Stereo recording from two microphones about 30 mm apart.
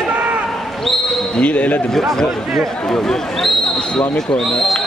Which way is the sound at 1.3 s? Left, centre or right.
Left.